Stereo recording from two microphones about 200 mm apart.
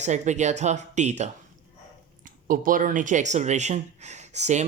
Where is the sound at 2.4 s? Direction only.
45° right (ahead or behind).